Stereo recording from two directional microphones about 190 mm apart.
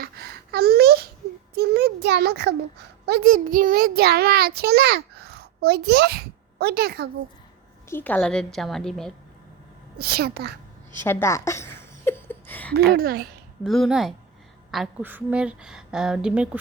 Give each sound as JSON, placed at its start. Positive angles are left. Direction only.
{"t": 0.0, "sound": "a sound", "side_deg": -55}
{"t": 3.1, "sound": "a child's voice", "side_deg": -50}
{"t": 7.9, "sound": "speech", "side_deg": 10}
{"t": 10.0, "sound": "speech", "side_deg": -55}
{"t": 11.0, "sound": "a sound", "side_deg": 15}
{"t": 12.7, "sound": "speech", "side_deg": -55}
{"t": 13.7, "sound": "speech", "side_deg": 0}